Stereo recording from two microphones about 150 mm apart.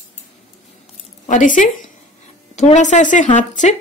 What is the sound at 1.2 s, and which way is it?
Speech, 55° left (ahead or behind).